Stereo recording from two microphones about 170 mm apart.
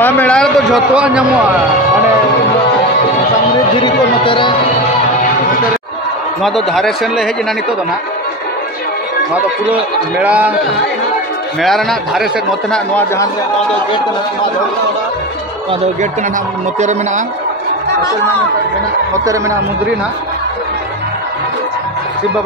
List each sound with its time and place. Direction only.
0.0 s a man's voice: 10° left (ahead or behind)
3.8 s speech: 30° left (ahead or behind)
6.4 s speech: centre (ahead or behind)
9.3 s speech: 10° right (ahead or behind)
11.6 s speech: centre (ahead or behind)